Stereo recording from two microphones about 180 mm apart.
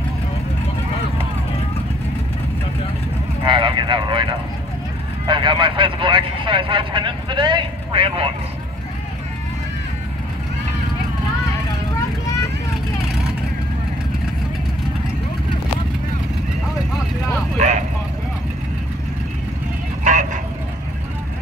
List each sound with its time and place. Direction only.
3.4 s vehicle: 30° right (ahead or behind)
5.2 s speech: 25° right (ahead or behind)
17.6 s vehicle: 40° right (ahead or behind)
20.0 s vehicle: 45° right (ahead or behind)